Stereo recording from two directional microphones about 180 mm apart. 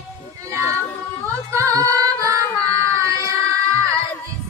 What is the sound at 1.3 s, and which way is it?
Female singing, 15° right (ahead or behind).